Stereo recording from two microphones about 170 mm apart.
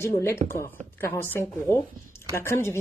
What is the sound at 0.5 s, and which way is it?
Speech, 15° left (ahead or behind).